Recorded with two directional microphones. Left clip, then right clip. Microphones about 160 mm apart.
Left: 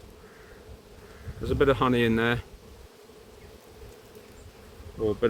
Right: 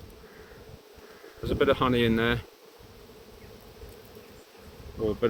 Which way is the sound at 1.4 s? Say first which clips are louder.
Left 1 dB; 40° left (ahead or behind).